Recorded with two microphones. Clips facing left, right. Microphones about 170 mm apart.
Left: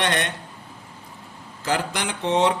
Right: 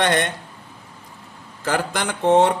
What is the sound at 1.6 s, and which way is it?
Speech, 50° right (ahead or behind).